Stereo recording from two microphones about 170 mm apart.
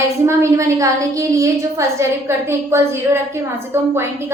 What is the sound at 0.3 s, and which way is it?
A woman's voice, 20° right (ahead or behind).